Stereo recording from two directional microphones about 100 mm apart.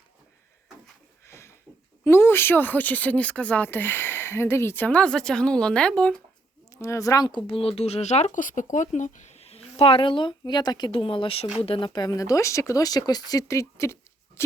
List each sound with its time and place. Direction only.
1.3 s a sound: 25° left (ahead or behind)
2.0 s speech: 25° left (ahead or behind)
6.7 s speech: 30° left (ahead or behind); by 8.3 s 90° left
9.3 s a woman's voice: 90° left; by 11.0 s 45° left (ahead or behind)
11.0 s speech: 65° left (ahead or behind)
11.9 s speech: 40° left (ahead or behind)